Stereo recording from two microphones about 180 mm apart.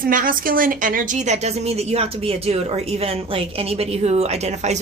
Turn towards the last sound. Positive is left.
turn(degrees=-40)  # may be behind; listen again after turning